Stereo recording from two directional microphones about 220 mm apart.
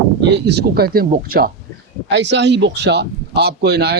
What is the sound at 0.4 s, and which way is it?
A man's voice, 45° right (ahead or behind).